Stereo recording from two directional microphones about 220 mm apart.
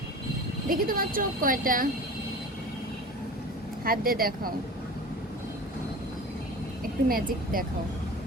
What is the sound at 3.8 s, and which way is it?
Speech, 40° right (ahead or behind).